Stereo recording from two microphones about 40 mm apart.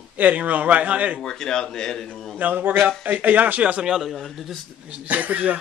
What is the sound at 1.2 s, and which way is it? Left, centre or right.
Speech, centre.